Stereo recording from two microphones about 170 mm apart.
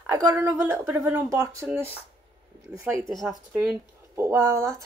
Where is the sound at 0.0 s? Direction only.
15° right (ahead or behind).